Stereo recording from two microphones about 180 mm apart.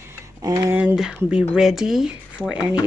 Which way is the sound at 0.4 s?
20° right (ahead or behind).